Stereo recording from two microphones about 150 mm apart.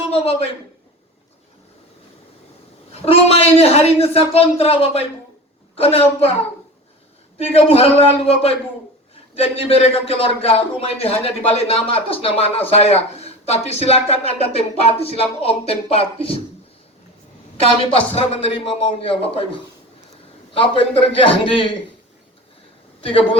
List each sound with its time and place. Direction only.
0.1 s a sound: 40° left (ahead or behind)
2.9 s speech: 40° left (ahead or behind)
7.3 s speech: 40° left (ahead or behind)
17.6 s speech: 40° left (ahead or behind)
20.6 s speech: 35° left (ahead or behind)